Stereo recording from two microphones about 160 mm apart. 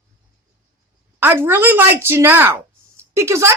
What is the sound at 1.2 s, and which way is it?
A woman's voice, 10° right (ahead or behind).